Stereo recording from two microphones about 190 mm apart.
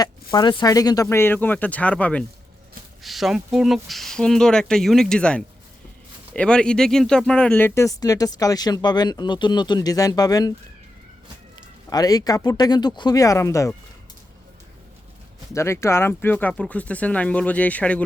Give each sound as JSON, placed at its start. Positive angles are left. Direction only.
{"t": 0.0, "sound": "speech", "side_deg": 20}
{"t": 11.5, "sound": "speech", "side_deg": 20}
{"t": 15.5, "sound": "speech", "side_deg": 15}